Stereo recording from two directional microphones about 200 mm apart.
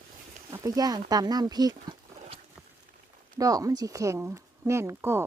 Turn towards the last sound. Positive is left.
turn(degrees=-10)  # may be behind; listen again after turning